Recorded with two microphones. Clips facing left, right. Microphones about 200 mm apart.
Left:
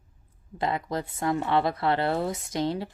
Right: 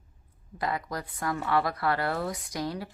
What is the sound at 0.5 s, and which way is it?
Speech, 25° left (ahead or behind).